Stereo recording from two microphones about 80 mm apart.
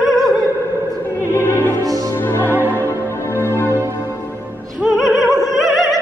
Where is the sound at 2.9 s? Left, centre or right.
Left.